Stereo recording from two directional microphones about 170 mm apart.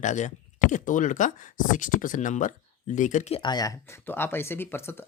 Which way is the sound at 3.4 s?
25° left (ahead or behind).